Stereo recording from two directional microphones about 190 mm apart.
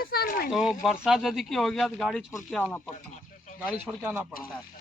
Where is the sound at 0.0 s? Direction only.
55° left (ahead or behind).